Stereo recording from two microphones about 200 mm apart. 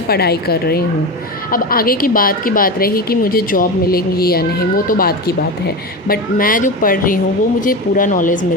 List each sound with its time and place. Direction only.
0.1 s a woman's voice: 50° left (ahead or behind)